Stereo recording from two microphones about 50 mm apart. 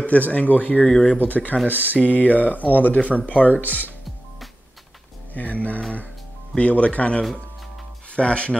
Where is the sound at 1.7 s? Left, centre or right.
Right.